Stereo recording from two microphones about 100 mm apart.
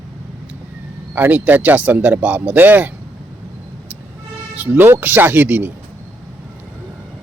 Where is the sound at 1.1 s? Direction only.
20° right (ahead or behind).